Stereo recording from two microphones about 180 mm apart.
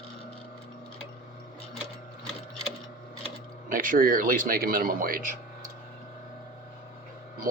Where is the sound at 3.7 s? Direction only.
50° right (ahead or behind).